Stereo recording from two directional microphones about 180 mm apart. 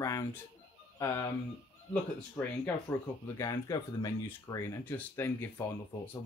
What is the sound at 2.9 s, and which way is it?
Speech, 20° left (ahead or behind).